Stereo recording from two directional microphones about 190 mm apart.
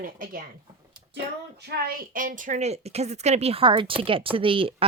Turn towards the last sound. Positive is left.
turn(degrees=-30)  # may be behind; listen again after turning